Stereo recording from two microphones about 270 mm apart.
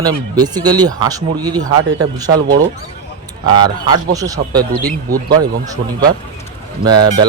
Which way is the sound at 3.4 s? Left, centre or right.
Centre.